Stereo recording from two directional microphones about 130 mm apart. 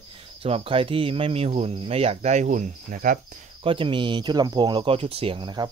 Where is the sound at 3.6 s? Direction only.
40° right (ahead or behind).